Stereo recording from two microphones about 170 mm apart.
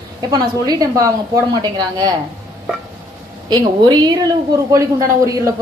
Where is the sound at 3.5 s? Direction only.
25° right (ahead or behind).